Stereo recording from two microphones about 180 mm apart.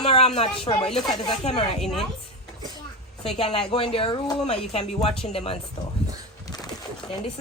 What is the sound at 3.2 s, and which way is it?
A woman's voice, 35° left (ahead or behind).